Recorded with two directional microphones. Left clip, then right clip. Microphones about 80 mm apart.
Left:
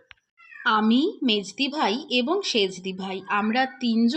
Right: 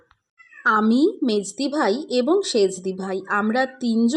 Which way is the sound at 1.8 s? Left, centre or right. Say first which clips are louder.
Right 4 dB; right.